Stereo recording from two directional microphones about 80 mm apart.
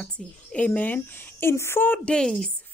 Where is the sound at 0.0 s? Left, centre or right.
Centre.